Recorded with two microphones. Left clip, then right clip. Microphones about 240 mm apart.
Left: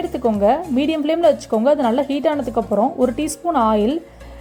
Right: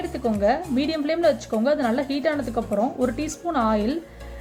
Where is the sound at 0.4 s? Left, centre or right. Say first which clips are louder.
Left 4 dB; left.